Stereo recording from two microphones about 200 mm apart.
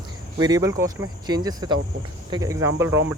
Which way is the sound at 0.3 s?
20° right (ahead or behind).